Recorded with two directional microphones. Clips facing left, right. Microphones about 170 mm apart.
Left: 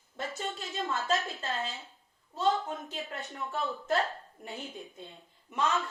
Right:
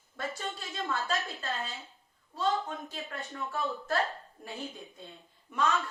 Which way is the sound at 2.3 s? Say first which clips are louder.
Left 2 dB; 20° left (ahead or behind).